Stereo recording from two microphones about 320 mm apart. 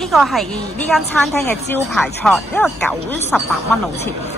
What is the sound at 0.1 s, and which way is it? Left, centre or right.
A woman's voice, centre.